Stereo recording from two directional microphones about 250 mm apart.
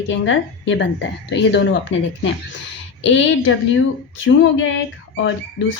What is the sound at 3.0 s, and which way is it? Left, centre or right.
A woman's voice, left.